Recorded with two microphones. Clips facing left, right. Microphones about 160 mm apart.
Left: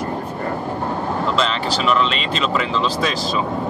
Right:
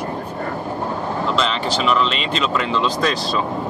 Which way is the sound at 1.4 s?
Centre (ahead or behind).